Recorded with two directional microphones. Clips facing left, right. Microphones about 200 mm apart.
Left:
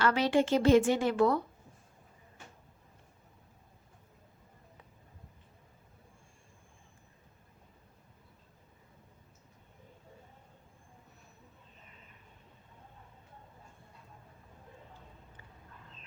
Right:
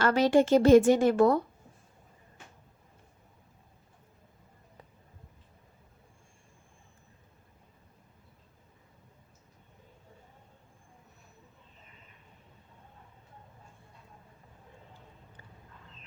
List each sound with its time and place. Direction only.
0.0 s a woman's voice: 45° right (ahead or behind)